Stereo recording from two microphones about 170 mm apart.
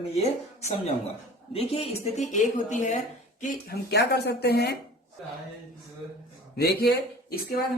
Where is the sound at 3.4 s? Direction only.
70° left (ahead or behind).